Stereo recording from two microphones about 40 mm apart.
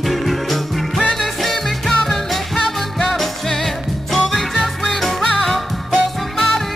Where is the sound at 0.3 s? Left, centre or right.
Centre.